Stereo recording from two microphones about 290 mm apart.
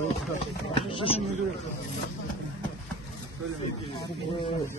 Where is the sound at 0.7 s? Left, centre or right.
Centre.